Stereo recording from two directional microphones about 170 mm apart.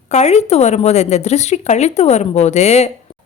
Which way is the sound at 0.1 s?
40° left (ahead or behind).